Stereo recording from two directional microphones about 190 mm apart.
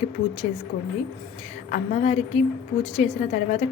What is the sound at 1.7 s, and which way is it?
A woman's voice, 35° left (ahead or behind).